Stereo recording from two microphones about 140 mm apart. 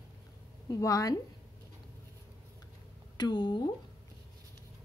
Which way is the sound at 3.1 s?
30° left (ahead or behind).